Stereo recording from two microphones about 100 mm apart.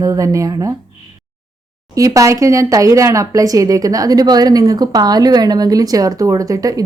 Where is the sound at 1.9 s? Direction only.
35° right (ahead or behind).